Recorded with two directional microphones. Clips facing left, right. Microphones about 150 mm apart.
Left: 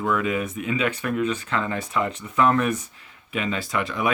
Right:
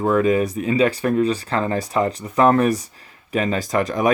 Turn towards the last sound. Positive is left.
turn(degrees=-40)  # may be behind; listen again after turning